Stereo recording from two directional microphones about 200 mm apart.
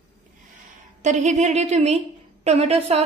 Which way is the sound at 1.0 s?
35° right (ahead or behind).